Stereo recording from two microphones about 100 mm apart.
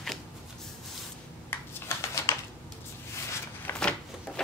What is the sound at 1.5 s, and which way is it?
Shuffling cards, 20° left (ahead or behind).